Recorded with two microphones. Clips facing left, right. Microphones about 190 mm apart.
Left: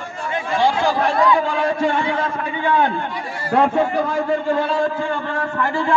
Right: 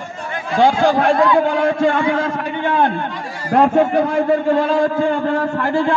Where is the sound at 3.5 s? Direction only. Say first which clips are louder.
Right 4 dB; 45° right (ahead or behind).